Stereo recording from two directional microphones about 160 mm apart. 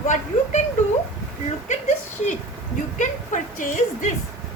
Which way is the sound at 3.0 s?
50° left (ahead or behind).